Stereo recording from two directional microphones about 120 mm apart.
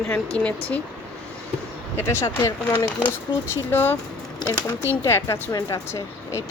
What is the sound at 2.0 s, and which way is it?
Speech, 20° left (ahead or behind).